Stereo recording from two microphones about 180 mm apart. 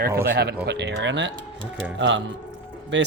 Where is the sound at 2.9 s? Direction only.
80° right.